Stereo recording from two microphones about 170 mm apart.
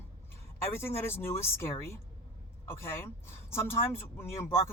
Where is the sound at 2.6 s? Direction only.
15° left (ahead or behind).